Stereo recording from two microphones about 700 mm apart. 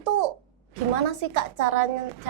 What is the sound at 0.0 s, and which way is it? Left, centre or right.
A child's voice, right.